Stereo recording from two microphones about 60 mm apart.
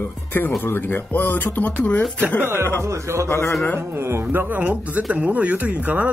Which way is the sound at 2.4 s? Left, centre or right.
Right.